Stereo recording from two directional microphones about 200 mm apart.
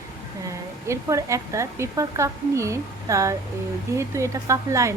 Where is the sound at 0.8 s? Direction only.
15° right (ahead or behind).